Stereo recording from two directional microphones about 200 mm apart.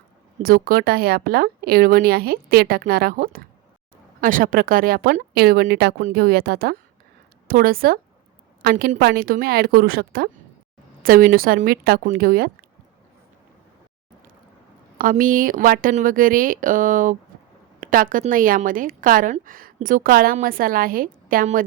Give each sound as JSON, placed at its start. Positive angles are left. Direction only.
{"t": 0.4, "sound": "a woman's voice", "side_deg": -45}
{"t": 14.9, "sound": "a woman's voice", "side_deg": -45}